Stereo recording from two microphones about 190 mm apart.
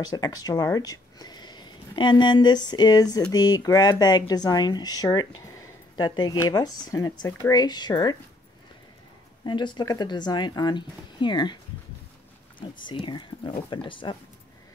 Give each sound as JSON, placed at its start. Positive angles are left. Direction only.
{"t": 0.0, "sound": "speech", "side_deg": 20}
{"t": 9.5, "sound": "speech", "side_deg": 25}
{"t": 12.8, "sound": "speech", "side_deg": 25}